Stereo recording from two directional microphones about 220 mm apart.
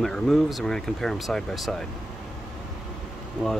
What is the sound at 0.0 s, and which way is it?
Speech, centre (ahead or behind).